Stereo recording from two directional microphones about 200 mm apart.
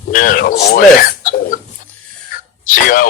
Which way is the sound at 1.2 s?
40° left (ahead or behind).